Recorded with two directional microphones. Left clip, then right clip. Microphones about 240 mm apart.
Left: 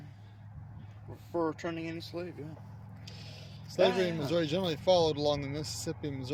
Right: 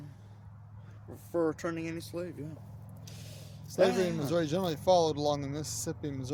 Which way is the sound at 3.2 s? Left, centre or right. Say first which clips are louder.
Left 1 dB; right.